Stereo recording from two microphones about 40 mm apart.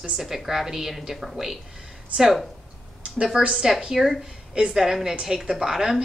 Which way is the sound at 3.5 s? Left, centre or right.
Centre.